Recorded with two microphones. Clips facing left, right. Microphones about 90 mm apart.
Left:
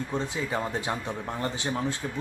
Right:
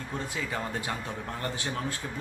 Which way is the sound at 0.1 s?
20° left (ahead or behind).